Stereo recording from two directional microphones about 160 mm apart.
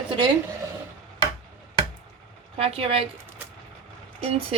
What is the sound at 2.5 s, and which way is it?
Speech, 35° right (ahead or behind).